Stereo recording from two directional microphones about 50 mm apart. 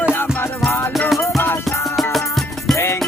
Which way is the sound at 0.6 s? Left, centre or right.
Left.